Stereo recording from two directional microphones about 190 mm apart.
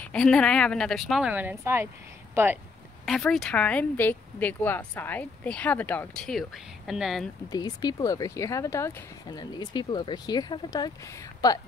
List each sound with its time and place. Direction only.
0.0 s a woman's voice: 5° left (ahead or behind); by 2.6 s 10° right (ahead or behind)
3.1 s speech: centre (ahead or behind)
7.4 s speech: 20° left (ahead or behind)